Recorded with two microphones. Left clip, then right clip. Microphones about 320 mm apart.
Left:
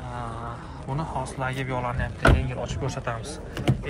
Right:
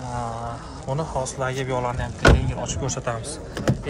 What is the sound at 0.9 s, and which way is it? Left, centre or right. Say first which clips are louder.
Speech: right 4 dB; centre.